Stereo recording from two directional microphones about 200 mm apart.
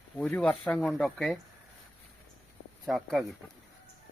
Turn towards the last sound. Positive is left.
turn(degrees=0)  # may be behind; listen again after turning